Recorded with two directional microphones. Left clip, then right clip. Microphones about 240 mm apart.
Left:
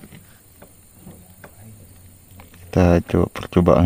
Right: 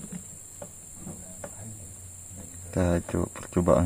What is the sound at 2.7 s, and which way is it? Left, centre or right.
Speech, left.